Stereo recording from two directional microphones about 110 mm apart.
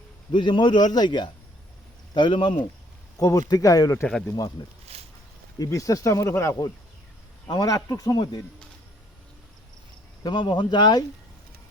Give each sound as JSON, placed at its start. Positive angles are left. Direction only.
{"t": 0.3, "sound": "speech", "side_deg": 50}
{"t": 3.2, "sound": "speech", "side_deg": 30}
{"t": 4.6, "sound": "speech", "side_deg": 40}
{"t": 7.4, "sound": "speech", "side_deg": 35}
{"t": 10.2, "sound": "speech", "side_deg": 45}